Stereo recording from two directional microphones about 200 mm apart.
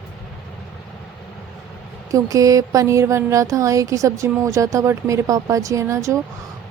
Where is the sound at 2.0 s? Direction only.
15° right (ahead or behind).